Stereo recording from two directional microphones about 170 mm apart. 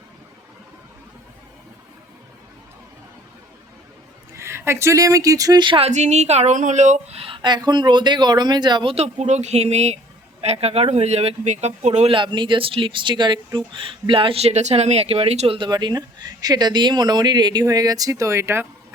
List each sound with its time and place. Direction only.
4.4 s speech: 15° right (ahead or behind)